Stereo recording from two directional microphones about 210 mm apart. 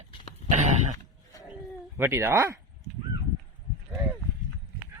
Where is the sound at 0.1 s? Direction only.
25° left (ahead or behind).